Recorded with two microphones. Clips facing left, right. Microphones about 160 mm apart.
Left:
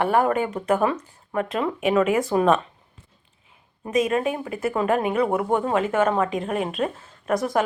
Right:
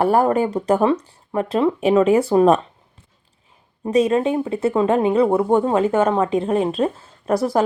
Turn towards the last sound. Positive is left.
turn(degrees=-30)  # may be behind; listen again after turning